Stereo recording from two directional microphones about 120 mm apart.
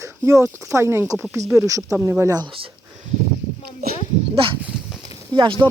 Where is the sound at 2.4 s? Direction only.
45° right (ahead or behind).